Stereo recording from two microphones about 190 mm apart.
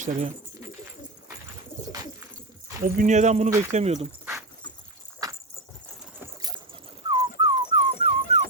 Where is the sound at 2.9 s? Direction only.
40° right (ahead or behind).